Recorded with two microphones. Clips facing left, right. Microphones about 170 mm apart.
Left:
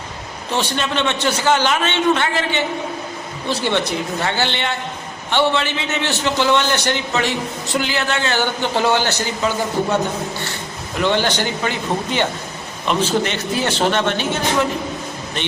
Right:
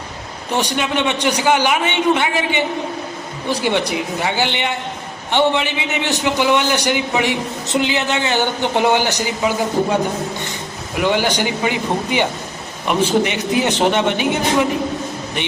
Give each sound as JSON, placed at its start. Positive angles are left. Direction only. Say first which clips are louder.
{"t": 0.5, "sound": "a man's voice", "louder": "right 2 dB", "side_deg": -15}